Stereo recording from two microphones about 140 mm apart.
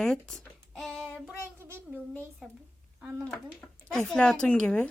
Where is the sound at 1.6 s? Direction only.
15° right (ahead or behind).